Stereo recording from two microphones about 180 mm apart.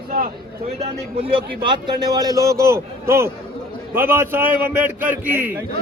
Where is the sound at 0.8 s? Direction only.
35° right (ahead or behind); by 5.7 s 10° right (ahead or behind).